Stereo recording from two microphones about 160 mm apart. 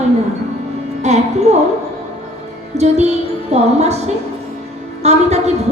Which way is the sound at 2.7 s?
45° right (ahead or behind).